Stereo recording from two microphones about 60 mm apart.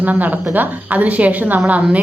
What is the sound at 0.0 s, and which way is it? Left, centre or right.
A woman's voice, right.